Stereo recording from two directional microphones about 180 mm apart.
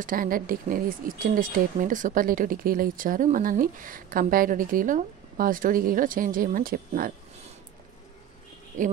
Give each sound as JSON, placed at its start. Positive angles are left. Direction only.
{"t": 0.0, "sound": "speech", "side_deg": -50}
{"t": 8.7, "sound": "speech", "side_deg": -45}